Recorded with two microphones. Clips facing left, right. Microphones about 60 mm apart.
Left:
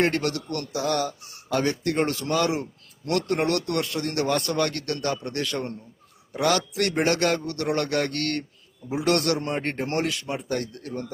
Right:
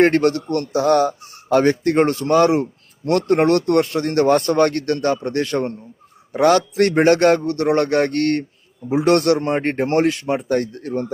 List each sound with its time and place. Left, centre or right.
0.0 s a man's voice: right